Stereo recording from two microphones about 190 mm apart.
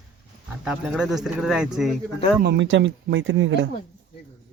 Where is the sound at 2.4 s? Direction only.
65° right (ahead or behind).